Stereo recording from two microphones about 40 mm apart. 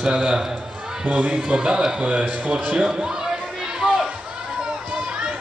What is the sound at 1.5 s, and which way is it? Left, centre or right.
A man's voice, right.